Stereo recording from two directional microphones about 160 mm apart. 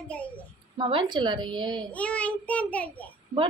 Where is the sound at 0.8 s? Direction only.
30° right (ahead or behind).